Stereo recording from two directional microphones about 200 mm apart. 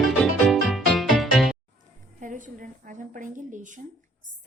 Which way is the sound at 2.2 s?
40° right (ahead or behind).